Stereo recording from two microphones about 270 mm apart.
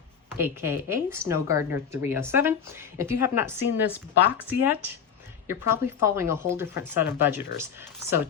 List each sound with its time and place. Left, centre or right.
0.4 s a woman's voice: centre